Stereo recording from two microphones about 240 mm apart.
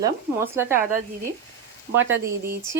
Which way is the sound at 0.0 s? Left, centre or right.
Centre.